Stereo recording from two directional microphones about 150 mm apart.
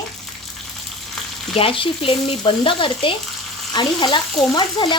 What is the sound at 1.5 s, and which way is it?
Speech, 35° left (ahead or behind).